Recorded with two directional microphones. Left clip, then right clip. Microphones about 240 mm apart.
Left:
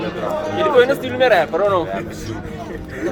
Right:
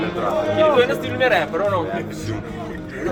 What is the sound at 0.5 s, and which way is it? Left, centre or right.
Speech, left.